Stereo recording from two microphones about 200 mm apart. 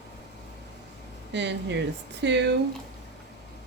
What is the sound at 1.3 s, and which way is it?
Speech, 60° right (ahead or behind).